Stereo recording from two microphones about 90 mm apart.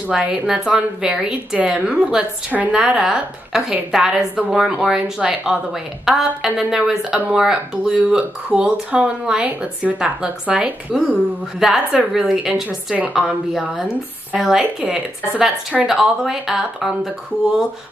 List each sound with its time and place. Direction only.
0.1 s speech: 10° right (ahead or behind)
12.6 s speech: 15° right (ahead or behind)